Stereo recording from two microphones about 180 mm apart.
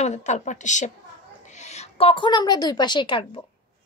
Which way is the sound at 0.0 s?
40° left (ahead or behind).